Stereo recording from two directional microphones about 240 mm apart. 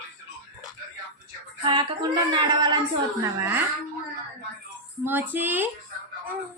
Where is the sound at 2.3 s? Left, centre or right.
Centre.